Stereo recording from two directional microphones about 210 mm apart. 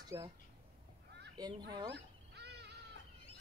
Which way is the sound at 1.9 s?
55° right (ahead or behind).